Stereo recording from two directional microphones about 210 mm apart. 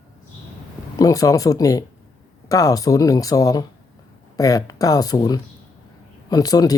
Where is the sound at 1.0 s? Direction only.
15° left (ahead or behind).